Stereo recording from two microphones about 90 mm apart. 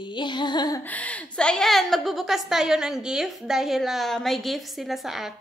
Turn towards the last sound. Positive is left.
turn(degrees=-5)  # may be behind; listen again after turning